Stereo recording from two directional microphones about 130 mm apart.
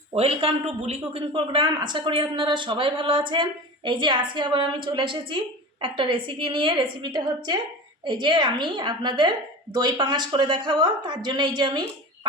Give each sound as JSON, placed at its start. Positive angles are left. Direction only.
{"t": 0.1, "sound": "a man's voice", "side_deg": -50}